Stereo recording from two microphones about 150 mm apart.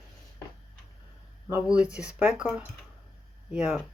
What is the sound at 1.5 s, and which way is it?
Speech, 10° right (ahead or behind).